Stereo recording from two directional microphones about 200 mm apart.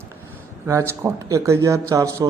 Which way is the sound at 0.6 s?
15° right (ahead or behind).